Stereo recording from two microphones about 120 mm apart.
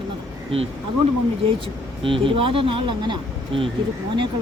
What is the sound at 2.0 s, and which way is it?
Speech, 50° right (ahead or behind).